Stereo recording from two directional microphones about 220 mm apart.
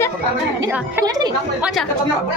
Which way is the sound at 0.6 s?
15° right (ahead or behind).